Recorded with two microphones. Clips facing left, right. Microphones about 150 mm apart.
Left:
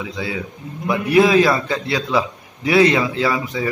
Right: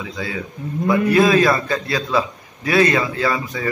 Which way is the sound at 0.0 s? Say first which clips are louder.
Left 1 dB; 10° left (ahead or behind).